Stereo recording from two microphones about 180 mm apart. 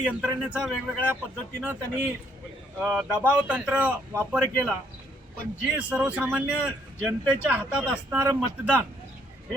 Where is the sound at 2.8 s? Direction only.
5° right (ahead or behind).